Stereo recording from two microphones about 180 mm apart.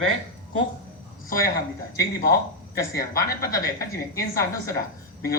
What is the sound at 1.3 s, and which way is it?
Speech, 55° left (ahead or behind).